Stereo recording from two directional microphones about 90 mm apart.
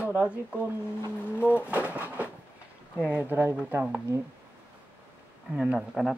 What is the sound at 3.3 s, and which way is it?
Speech, 25° right (ahead or behind).